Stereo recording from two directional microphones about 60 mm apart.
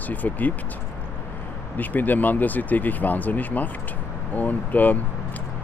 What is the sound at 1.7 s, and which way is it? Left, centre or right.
Speech, left.